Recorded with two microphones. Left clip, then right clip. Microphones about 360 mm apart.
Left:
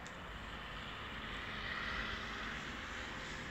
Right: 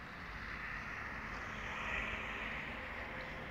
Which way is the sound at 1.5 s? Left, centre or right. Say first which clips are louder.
Right 1 dB; centre.